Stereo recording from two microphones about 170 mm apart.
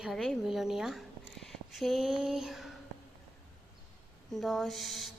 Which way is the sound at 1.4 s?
Centre (ahead or behind).